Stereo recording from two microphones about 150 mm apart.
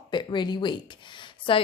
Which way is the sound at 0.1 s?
30° left (ahead or behind).